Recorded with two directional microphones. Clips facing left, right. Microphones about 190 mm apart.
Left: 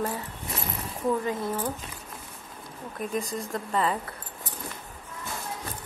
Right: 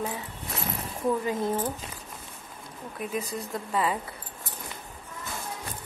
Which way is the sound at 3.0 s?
5° right (ahead or behind).